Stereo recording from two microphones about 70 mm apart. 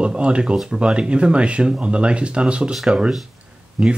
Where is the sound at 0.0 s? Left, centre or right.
Centre.